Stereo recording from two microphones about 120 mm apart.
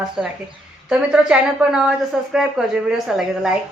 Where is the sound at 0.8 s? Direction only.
10° right (ahead or behind).